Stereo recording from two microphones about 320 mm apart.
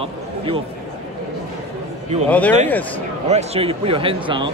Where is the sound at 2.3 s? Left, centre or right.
Centre.